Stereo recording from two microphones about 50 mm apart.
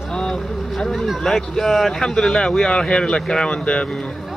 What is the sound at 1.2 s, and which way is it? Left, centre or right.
Speech, centre.